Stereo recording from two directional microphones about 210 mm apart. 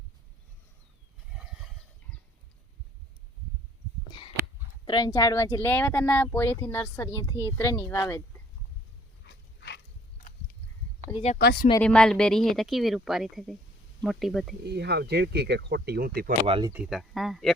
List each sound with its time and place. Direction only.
4.9 s speech: 20° left (ahead or behind)
9.2 s dog: 55° left (ahead or behind)
11.1 s speech: 30° left (ahead or behind)
11.3 s speech: 50° left (ahead or behind)
11.8 s speech: 5° left (ahead or behind)
14.6 s speech: 50° right (ahead or behind)
16.5 s speech: 20° right (ahead or behind)
16.7 s speech: 5° right (ahead or behind)